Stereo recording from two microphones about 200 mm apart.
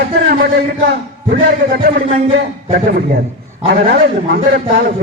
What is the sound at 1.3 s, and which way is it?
Speech, 45° right (ahead or behind).